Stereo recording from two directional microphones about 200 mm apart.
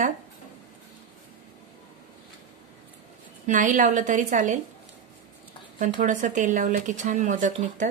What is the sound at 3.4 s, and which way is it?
Speech, 40° right (ahead or behind).